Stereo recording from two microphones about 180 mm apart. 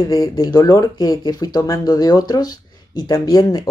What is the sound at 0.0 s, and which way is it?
Speech, 20° left (ahead or behind).